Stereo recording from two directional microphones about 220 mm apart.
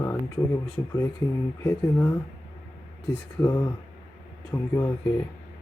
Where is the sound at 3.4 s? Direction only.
10° left (ahead or behind).